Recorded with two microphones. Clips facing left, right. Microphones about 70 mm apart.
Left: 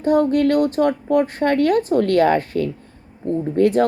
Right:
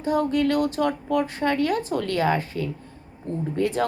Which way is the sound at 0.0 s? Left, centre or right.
Left.